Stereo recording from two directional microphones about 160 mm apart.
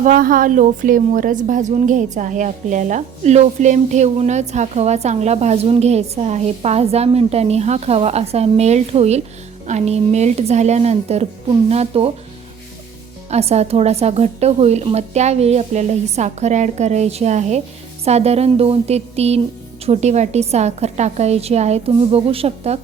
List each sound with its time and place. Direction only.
0.0 s a woman's voice: 60° right (ahead or behind); by 12.1 s 40° right (ahead or behind)
13.3 s a woman's voice: 40° right (ahead or behind)